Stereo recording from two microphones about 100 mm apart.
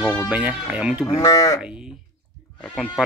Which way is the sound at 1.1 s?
35° left (ahead or behind).